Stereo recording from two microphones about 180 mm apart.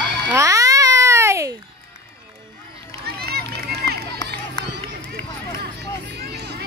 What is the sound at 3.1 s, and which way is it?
Run, 60° right (ahead or behind).